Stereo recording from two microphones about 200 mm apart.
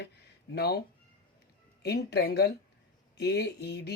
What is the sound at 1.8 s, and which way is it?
A woman's voice, 55° left (ahead or behind).